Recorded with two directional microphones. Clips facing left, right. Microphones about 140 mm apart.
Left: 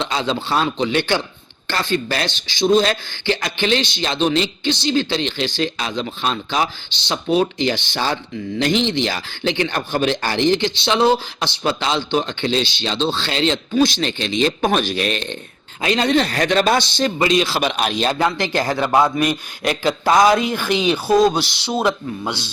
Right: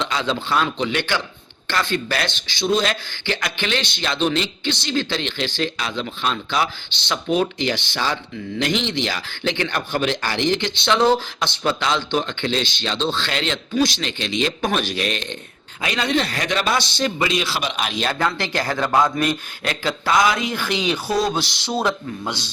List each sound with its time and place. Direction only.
0.0 s speech: 25° left (ahead or behind)
10.8 s speech: 20° left (ahead or behind)
14.0 s speech: 40° left (ahead or behind)
17.7 s speech: 45° left (ahead or behind)
18.0 s a man's voice: 15° left (ahead or behind)
21.7 s a man's voice: 10° left (ahead or behind)